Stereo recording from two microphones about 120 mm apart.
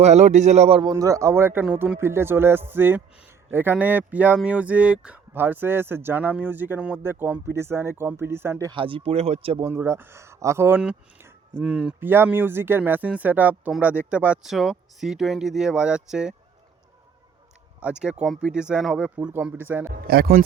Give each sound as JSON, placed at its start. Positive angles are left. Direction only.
{"t": 0.0, "sound": "a man's voice", "side_deg": -65}
{"t": 0.8, "sound": "speech", "side_deg": -30}
{"t": 8.7, "sound": "speech", "side_deg": -45}
{"t": 9.6, "sound": "speech", "side_deg": -20}
{"t": 11.6, "sound": "speech", "side_deg": -5}
{"t": 11.9, "sound": "speech", "side_deg": -20}
{"t": 17.7, "sound": "speech", "side_deg": -10}